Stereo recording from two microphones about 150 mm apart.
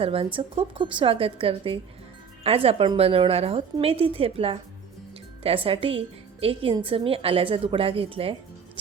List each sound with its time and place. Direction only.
0.0 s a woman's voice: 40° right (ahead or behind)